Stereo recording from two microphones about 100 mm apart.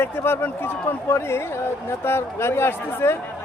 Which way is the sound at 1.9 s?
25° left (ahead or behind).